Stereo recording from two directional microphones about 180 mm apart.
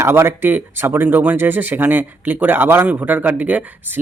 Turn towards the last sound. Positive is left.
turn(degrees=-10)  # may be behind; listen again after turning